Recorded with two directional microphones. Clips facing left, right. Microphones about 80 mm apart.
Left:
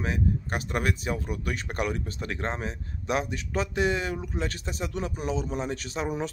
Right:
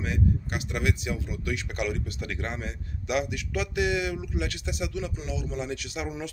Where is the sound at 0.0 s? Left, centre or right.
Left.